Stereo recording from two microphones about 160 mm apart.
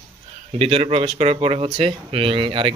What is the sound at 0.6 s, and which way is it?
Speech, 35° right (ahead or behind).